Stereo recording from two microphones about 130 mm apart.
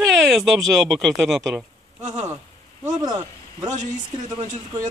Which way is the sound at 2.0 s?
65° right (ahead or behind).